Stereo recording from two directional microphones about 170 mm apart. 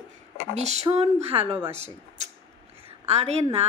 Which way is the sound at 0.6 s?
40° right (ahead or behind).